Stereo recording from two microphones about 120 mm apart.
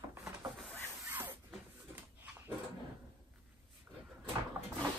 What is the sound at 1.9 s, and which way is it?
Dog, 15° right (ahead or behind).